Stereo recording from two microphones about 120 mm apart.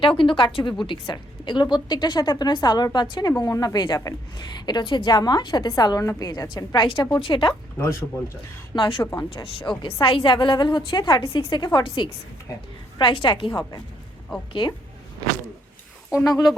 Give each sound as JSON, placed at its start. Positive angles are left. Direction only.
{"t": 0.0, "sound": "a woman's voice", "side_deg": 45}
{"t": 7.8, "sound": "speech", "side_deg": 25}
{"t": 8.7, "sound": "a woman's voice", "side_deg": 45}